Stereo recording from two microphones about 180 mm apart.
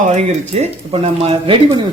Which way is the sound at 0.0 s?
40° right (ahead or behind).